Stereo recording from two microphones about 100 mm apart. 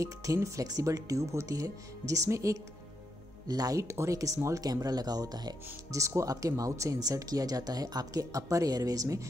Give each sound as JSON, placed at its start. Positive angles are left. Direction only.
{"t": 0.0, "sound": "speech", "side_deg": -30}